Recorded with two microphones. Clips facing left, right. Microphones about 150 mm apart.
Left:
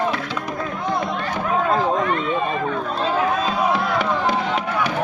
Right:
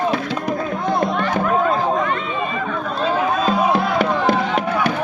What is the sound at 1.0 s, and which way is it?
Music, 60° right (ahead or behind).